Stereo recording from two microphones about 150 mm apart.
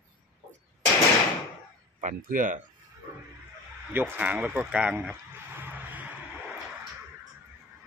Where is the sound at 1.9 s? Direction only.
60° right (ahead or behind).